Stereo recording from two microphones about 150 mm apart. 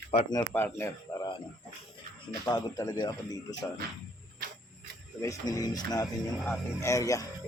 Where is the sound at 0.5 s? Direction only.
15° left (ahead or behind).